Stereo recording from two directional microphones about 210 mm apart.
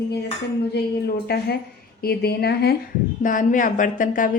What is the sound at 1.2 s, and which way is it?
A woman's voice, 50° left (ahead or behind).